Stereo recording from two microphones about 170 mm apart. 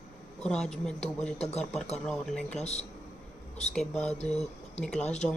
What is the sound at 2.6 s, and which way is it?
Speech, 40° left (ahead or behind).